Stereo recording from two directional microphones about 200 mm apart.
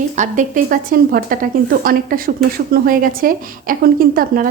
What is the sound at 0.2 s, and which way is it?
A woman's voice, 40° right (ahead or behind).